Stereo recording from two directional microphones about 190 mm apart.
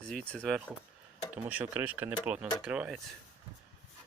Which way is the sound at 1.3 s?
10° right (ahead or behind).